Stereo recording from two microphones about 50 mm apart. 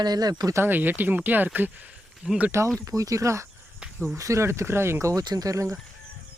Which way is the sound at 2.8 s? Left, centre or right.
Right.